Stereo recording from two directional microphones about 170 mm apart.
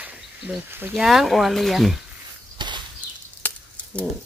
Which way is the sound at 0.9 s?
Centre (ahead or behind).